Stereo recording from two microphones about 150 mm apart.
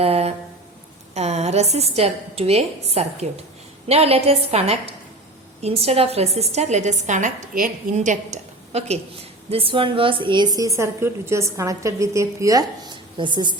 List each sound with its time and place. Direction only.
0.0 s a sound: 45° right (ahead or behind)
1.1 s a woman's voice: 50° right (ahead or behind)
9.5 s a woman's voice: 40° right (ahead or behind)